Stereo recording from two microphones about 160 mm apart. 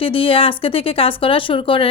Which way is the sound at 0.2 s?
35° left (ahead or behind).